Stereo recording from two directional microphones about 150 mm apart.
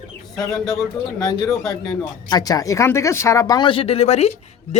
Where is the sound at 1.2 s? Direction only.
25° left (ahead or behind).